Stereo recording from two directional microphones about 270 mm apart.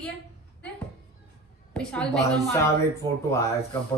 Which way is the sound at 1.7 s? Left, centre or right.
Centre.